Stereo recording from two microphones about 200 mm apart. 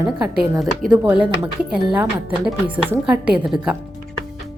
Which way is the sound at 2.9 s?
5° right (ahead or behind).